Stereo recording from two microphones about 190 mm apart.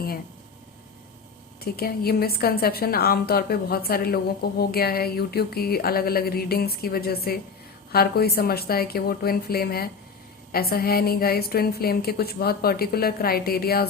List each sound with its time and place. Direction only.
1.6 s a woman's voice: 55° left (ahead or behind)